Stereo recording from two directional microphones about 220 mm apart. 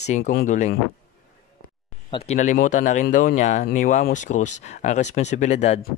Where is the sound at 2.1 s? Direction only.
30° left (ahead or behind).